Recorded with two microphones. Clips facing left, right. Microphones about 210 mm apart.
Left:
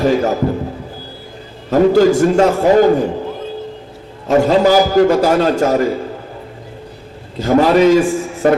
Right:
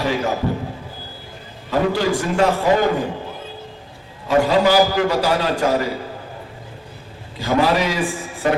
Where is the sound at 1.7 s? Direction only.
45° left (ahead or behind).